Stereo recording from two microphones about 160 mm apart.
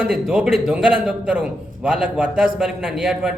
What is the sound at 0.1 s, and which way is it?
A man's voice, 5° right (ahead or behind).